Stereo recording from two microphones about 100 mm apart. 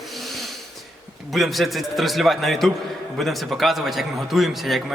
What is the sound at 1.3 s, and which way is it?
A man's voice, centre (ahead or behind).